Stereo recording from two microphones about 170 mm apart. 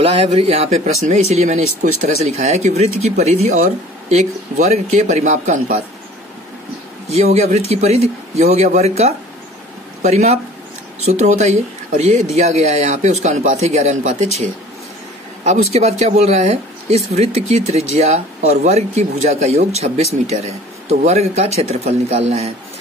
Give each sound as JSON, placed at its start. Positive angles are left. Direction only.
{"t": 0.0, "sound": "a man's voice", "side_deg": -35}
{"t": 7.1, "sound": "a man's voice", "side_deg": -40}
{"t": 21.1, "sound": "speech", "side_deg": -40}